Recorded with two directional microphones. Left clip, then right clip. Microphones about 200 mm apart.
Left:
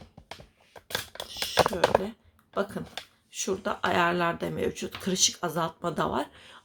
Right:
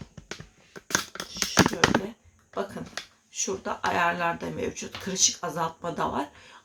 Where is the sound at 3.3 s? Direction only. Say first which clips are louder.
Even; 40° left (ahead or behind).